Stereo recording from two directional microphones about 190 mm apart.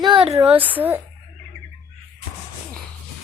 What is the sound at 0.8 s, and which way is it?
Speech, 10° right (ahead or behind).